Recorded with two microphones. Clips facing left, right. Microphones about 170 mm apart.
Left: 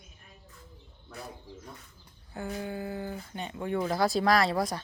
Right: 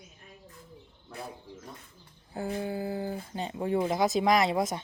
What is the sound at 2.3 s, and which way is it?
Speech, 30° right (ahead or behind).